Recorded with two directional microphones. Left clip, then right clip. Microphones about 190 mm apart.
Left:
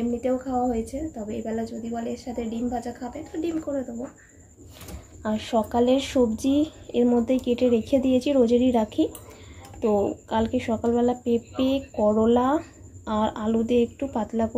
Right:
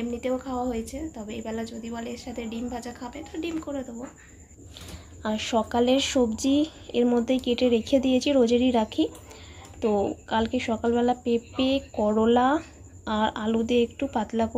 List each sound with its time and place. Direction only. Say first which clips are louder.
0.1 s a woman's voice: left 3 dB; 10° left (ahead or behind)
5.2 s speech: left 1 dB; centre (ahead or behind)